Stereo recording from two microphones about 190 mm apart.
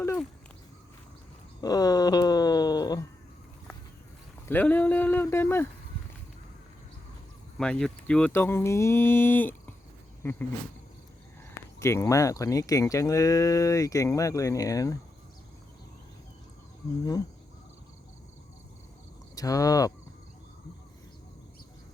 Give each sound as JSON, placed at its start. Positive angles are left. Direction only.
{"t": 1.6, "sound": "a sound", "side_deg": 20}
{"t": 4.4, "sound": "speech", "side_deg": 10}
{"t": 7.6, "sound": "speech", "side_deg": 5}
{"t": 11.8, "sound": "speech", "side_deg": 15}
{"t": 19.4, "sound": "speech", "side_deg": 20}